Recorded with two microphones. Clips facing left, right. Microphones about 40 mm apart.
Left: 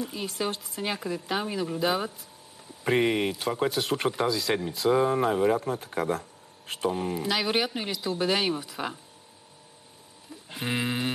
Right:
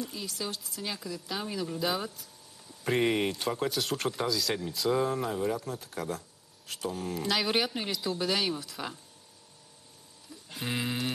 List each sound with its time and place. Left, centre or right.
0.0 s speech: left
1.4 s speech: left
3.1 s speech: centre
5.2 s speech: left
7.1 s speech: centre
8.2 s speech: left
10.3 s music: left